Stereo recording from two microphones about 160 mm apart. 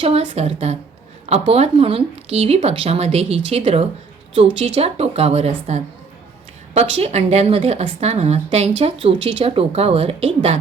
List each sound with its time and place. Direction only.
0.0 s a woman's voice: 40° right (ahead or behind)